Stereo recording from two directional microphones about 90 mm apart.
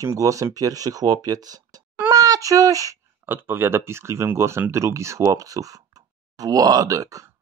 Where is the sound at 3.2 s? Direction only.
25° right (ahead or behind).